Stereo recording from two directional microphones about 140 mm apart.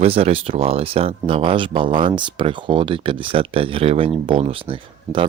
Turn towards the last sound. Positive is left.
turn(degrees=-40)  # may be behind; listen again after turning